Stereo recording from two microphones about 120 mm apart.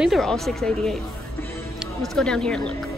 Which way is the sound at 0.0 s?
Centre (ahead or behind).